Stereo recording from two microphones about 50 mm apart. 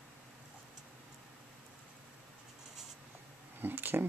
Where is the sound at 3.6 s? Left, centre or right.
Right.